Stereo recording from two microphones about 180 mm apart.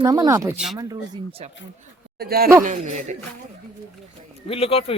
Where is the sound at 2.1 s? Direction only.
60° right (ahead or behind).